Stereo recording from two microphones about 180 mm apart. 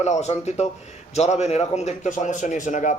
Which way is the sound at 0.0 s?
40° left (ahead or behind).